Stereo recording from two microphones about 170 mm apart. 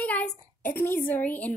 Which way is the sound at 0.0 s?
10° left (ahead or behind).